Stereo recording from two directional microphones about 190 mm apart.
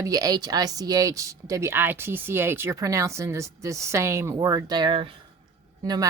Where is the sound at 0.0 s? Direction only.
20° right (ahead or behind).